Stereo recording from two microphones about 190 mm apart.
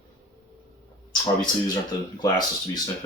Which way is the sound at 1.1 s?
20° left (ahead or behind).